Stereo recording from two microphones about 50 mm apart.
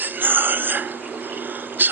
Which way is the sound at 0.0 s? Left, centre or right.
Right.